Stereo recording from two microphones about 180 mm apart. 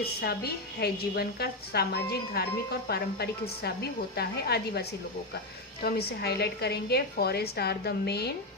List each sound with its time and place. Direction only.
0.0 s a woman's voice: 60° left (ahead or behind)